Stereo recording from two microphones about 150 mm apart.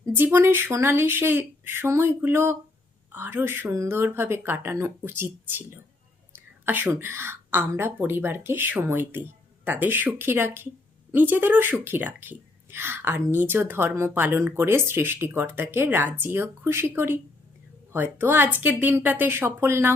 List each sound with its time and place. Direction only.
0.0 s a woman's voice: 15° right (ahead or behind)